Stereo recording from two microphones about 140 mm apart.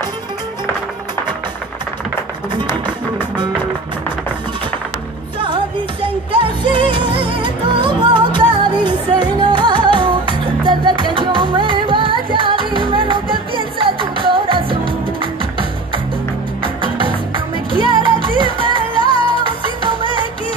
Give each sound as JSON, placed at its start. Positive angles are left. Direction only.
{"t": 6.3, "sound": "music", "side_deg": -35}
{"t": 16.6, "sound": "music", "side_deg": -35}